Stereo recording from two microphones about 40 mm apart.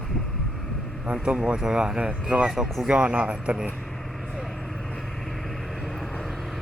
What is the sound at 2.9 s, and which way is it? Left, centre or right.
Speech, right.